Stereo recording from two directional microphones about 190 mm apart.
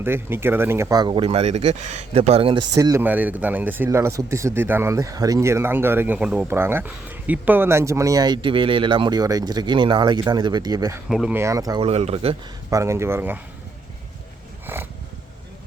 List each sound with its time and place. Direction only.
0.0 s speech: 10° right (ahead or behind)
11.1 s speech: 5° right (ahead or behind)
11.8 s speech: 35° right (ahead or behind)
12.7 s speech: 15° right (ahead or behind)
14.7 s a sound: 10° right (ahead or behind)